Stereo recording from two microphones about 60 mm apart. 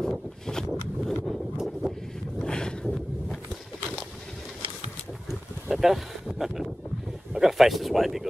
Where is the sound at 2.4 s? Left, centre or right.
Centre.